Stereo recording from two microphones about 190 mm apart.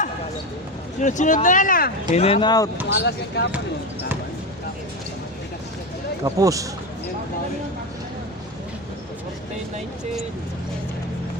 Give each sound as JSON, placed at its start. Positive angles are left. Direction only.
{"t": 1.0, "sound": "speech", "side_deg": 40}
{"t": 2.9, "sound": "speech", "side_deg": 60}
{"t": 6.2, "sound": "speech", "side_deg": -15}